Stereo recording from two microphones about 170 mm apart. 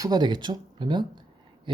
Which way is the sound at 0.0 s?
25° right (ahead or behind).